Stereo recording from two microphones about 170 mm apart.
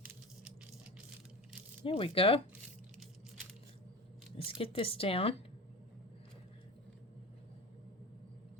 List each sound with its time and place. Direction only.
1.8 s speech: 35° left (ahead or behind)
4.4 s speech: 35° left (ahead or behind)